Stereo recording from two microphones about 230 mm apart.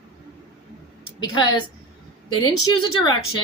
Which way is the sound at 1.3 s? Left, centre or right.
Centre.